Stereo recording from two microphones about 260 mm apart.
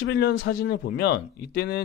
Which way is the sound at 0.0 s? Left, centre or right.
Left.